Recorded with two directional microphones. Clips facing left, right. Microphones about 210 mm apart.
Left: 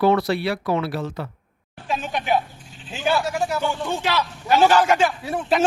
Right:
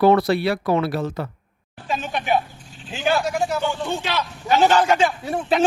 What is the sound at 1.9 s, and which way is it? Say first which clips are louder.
Speech: even; centre (ahead or behind).